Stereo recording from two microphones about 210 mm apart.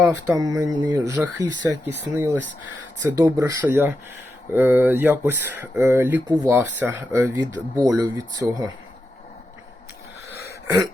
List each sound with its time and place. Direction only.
0.0 s speech: 15° right (ahead or behind)